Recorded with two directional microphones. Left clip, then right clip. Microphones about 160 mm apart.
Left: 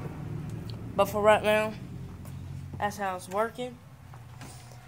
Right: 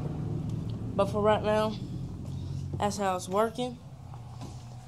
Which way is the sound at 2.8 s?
10° right (ahead or behind).